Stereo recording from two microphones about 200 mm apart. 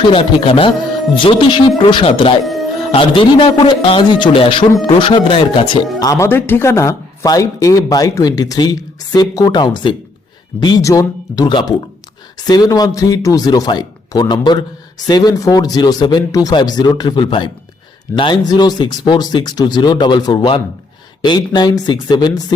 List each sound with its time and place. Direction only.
0.1 s a man's voice: 25° left (ahead or behind)
2.4 s music: centre (ahead or behind)
2.9 s a man's voice: 25° left (ahead or behind)
6.1 s a man's voice: 15° left (ahead or behind)